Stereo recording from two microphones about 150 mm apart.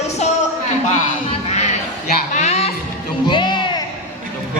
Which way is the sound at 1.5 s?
45° left (ahead or behind).